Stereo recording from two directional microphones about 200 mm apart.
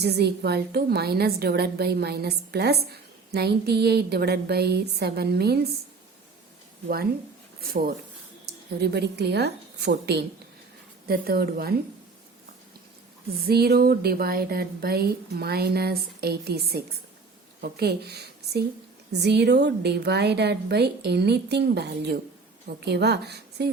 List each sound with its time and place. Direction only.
0.0 s a woman's voice: 55° right (ahead or behind)
6.8 s a woman's voice: 50° right (ahead or behind)
8.5 s a sound: 55° right (ahead or behind)
8.8 s a woman's voice: 55° right (ahead or behind)
13.4 s a woman's voice: 50° right (ahead or behind)